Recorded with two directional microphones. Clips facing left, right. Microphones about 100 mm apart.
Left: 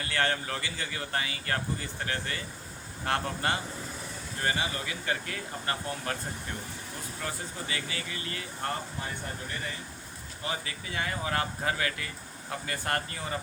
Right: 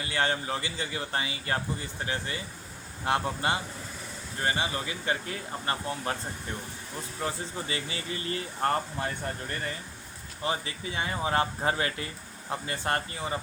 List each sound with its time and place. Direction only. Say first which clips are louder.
0.0 s speech: right 1 dB; 20° right (ahead or behind)
7.2 s speech: right 4 dB; 25° right (ahead or behind)
8.6 s speech: right 7 dB; 40° right (ahead or behind)
10.4 s speech: right 4 dB; 30° right (ahead or behind)